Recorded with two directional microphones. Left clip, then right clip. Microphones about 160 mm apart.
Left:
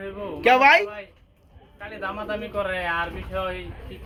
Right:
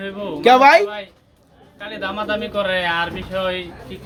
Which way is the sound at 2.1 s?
20° right (ahead or behind).